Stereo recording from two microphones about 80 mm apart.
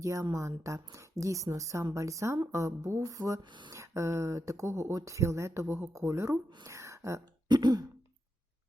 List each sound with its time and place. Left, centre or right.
0.0 s a woman's voice: right
6.7 s a sound: right
7.4 s throat clearing: right